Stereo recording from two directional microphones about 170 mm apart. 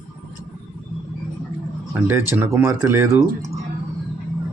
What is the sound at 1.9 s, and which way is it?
Speech, 15° right (ahead or behind).